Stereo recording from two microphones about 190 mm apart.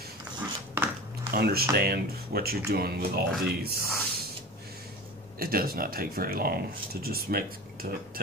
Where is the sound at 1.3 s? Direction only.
55° right (ahead or behind).